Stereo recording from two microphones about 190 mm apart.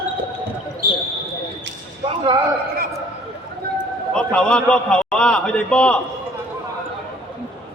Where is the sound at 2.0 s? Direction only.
25° right (ahead or behind).